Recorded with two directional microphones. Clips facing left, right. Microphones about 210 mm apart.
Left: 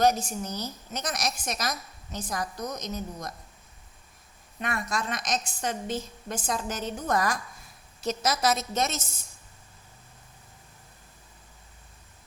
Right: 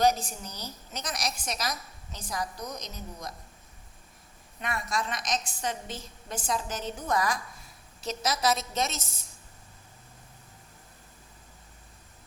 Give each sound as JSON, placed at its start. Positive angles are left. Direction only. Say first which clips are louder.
{"t": 0.0, "sound": "a woman's voice", "louder": "left 2 dB", "side_deg": 50}
{"t": 4.6, "sound": "a woman's voice", "louder": "left 1 dB", "side_deg": 50}